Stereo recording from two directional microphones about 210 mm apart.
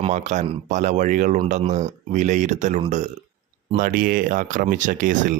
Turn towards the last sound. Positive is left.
turn(degrees=-40)  # may be behind; listen again after turning